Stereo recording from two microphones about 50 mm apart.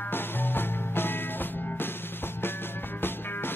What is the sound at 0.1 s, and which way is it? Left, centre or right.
Music, left.